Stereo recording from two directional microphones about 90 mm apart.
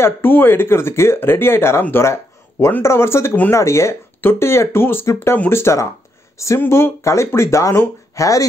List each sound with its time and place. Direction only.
0.0 s speech: 25° left (ahead or behind); by 8.5 s 40° left (ahead or behind)